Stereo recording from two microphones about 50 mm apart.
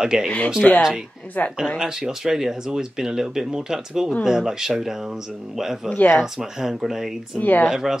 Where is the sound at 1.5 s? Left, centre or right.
Centre.